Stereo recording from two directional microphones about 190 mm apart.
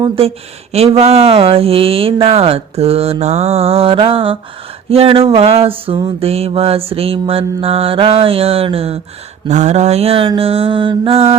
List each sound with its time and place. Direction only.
0.0 s speech: 30° right (ahead or behind)